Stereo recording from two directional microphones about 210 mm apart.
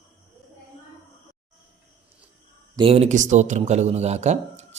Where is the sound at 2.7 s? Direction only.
25° right (ahead or behind).